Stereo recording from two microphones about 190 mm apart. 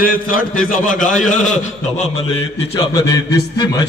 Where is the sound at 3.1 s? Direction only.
20° left (ahead or behind).